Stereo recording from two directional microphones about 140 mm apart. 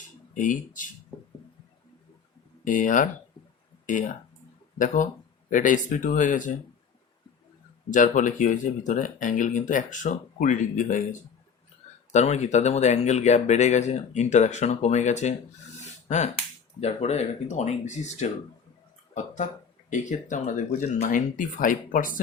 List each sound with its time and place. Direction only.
0.0 s a sound: 65° left (ahead or behind)
2.6 s speech: 65° left (ahead or behind)
5.5 s speech: 65° left (ahead or behind)
7.9 s speech: 65° left (ahead or behind)
12.1 s speech: 50° left (ahead or behind); by 22.2 s 80° left